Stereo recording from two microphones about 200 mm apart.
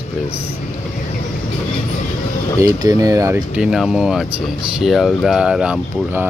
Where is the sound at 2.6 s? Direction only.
15° right (ahead or behind).